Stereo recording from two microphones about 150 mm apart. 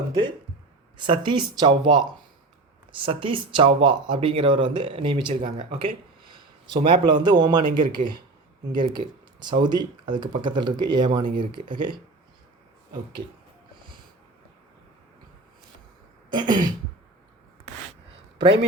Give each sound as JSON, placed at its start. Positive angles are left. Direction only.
{"t": 0.1, "sound": "a man's voice", "side_deg": -30}
{"t": 16.3, "sound": "throat clearing", "side_deg": -30}